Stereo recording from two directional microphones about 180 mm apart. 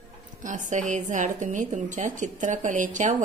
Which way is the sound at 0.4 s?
45° right (ahead or behind).